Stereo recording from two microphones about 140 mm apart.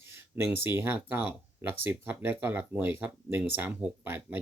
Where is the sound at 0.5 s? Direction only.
15° right (ahead or behind).